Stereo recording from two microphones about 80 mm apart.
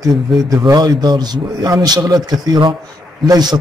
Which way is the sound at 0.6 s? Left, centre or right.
Right.